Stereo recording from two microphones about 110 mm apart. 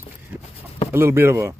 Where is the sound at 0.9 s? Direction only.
20° right (ahead or behind).